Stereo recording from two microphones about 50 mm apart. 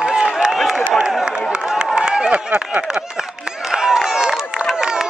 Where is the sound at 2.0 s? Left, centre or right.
Centre.